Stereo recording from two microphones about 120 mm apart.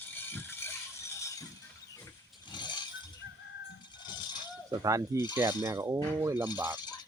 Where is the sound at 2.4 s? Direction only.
40° left (ahead or behind).